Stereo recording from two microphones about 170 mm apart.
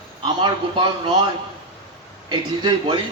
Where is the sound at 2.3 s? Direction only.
30° right (ahead or behind).